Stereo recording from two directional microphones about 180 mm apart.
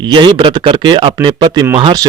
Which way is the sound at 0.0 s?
25° right (ahead or behind).